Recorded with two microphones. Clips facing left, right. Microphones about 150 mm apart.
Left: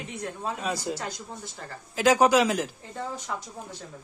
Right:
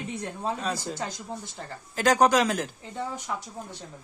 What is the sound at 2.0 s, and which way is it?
Speech, 5° left (ahead or behind).